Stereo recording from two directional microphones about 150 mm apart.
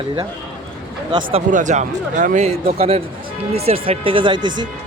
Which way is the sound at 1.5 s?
55° right (ahead or behind).